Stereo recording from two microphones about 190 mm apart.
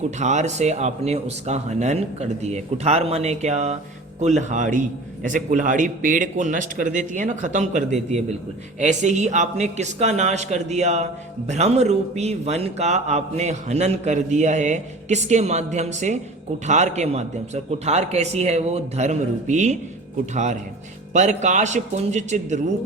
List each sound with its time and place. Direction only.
0.2 s a man's voice: 35° right (ahead or behind)